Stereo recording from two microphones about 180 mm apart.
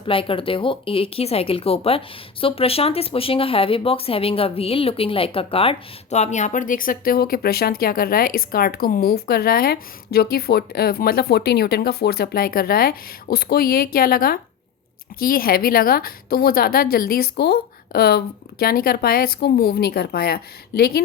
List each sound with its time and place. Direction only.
0.0 s a woman's voice: 30° left (ahead or behind); by 21.0 s 60° left (ahead or behind)